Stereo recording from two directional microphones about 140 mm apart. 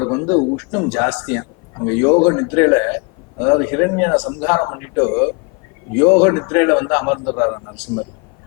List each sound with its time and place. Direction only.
0.0 s a man's voice: 15° left (ahead or behind)